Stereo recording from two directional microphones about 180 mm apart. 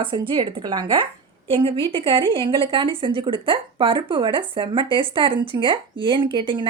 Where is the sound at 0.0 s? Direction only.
25° right (ahead or behind).